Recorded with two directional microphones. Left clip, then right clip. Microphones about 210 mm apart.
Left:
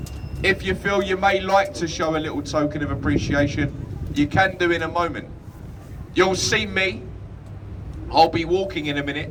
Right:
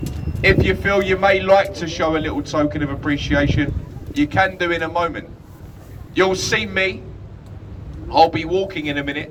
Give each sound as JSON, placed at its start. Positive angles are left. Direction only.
{"t": 0.4, "sound": "a man's voice", "side_deg": 25}
{"t": 8.1, "sound": "a man's voice", "side_deg": 30}